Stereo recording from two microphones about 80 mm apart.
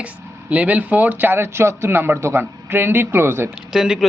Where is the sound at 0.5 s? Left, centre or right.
Centre.